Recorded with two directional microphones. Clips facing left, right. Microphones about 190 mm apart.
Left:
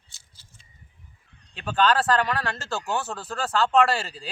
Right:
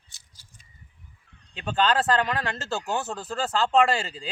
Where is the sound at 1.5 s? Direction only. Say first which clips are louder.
Left 2 dB; 25° right (ahead or behind).